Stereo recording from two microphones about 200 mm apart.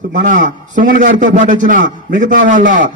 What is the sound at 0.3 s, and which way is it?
A man's voice, 40° right (ahead or behind).